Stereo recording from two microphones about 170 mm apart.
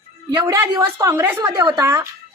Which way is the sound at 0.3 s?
20° right (ahead or behind).